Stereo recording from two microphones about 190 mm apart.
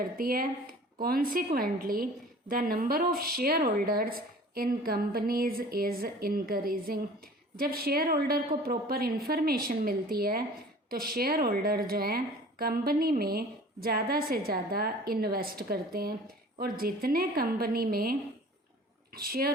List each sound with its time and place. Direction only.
0.2 s speech: 50° right (ahead or behind)